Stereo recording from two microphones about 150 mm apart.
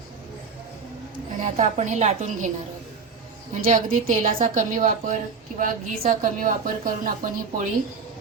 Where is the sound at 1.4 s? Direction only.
50° right (ahead or behind).